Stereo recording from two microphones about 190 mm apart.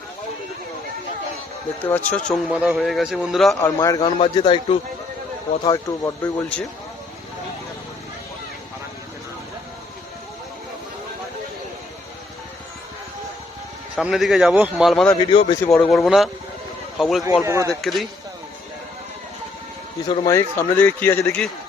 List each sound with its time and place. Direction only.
1.8 s a man's voice: 10° left (ahead or behind)
2.5 s a man's voice: 5° right (ahead or behind)
3.6 s a man's voice: 15° left (ahead or behind)
13.9 s a man's voice: 5° right (ahead or behind)
15.3 s a man's voice: 30° left (ahead or behind)
15.6 s a man's voice: 5° left (ahead or behind)
17.4 s speech: 15° right (ahead or behind)
17.8 s a man's voice: centre (ahead or behind)
20.1 s a man's voice: 15° left (ahead or behind)